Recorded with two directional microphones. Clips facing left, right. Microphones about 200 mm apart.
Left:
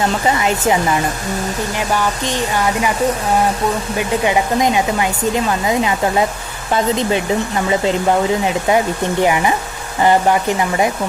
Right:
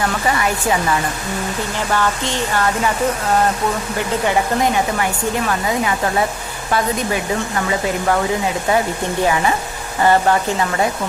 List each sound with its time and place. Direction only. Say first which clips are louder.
0.0 s speech: left 2 dB; 20° left (ahead or behind)
3.9 s speech: left 2 dB; 15° left (ahead or behind)